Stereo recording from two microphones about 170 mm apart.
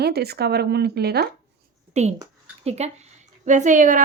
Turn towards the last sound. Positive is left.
turn(degrees=-50)  # may be behind; listen again after turning